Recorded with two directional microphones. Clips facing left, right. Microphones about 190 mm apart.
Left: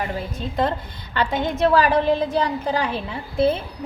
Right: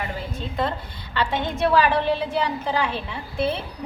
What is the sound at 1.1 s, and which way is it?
A woman's voice, 45° left (ahead or behind).